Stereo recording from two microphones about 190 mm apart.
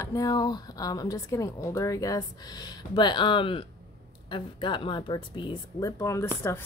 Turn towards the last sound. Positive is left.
turn(degrees=15)  # may be behind; listen again after turning